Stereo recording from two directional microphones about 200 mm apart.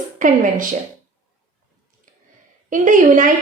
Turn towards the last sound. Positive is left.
turn(degrees=-40)  # may be behind; listen again after turning